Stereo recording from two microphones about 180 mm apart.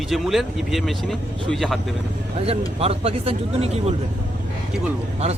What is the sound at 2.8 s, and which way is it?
Speech, 35° right (ahead or behind).